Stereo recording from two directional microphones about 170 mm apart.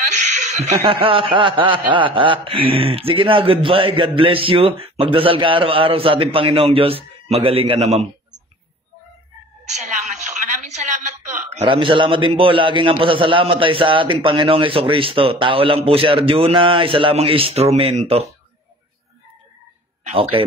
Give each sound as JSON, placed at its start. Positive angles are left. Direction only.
{"t": 0.5, "sound": "speech", "side_deg": -40}
{"t": 9.7, "sound": "a sound", "side_deg": -45}
{"t": 11.6, "sound": "speech", "side_deg": -30}
{"t": 20.0, "sound": "speech", "side_deg": -35}